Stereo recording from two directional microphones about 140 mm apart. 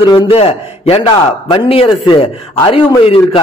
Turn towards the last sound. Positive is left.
turn(degrees=40)  # may be behind; listen again after turning